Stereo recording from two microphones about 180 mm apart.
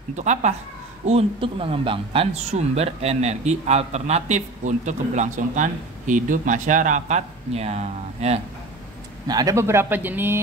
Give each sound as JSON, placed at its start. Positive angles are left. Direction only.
{"t": 0.1, "sound": "speech", "side_deg": -40}
{"t": 9.3, "sound": "speech", "side_deg": -20}